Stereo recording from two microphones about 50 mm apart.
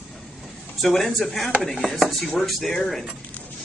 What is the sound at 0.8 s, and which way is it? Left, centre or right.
Speech, centre.